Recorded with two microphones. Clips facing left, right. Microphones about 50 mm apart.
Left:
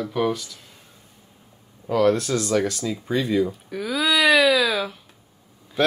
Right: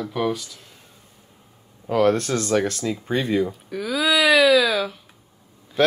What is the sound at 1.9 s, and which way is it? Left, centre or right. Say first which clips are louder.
Speech: even; right.